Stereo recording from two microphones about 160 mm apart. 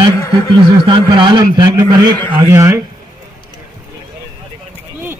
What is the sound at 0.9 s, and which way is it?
A man's voice, 30° right (ahead or behind).